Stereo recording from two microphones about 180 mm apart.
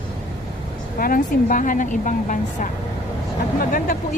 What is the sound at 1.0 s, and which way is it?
A woman's voice, 50° left (ahead or behind).